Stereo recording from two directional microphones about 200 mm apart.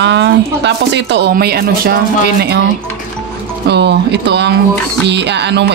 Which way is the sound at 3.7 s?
60° right (ahead or behind).